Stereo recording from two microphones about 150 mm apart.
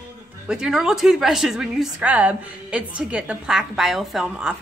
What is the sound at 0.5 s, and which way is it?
A woman's voice, 5° right (ahead or behind).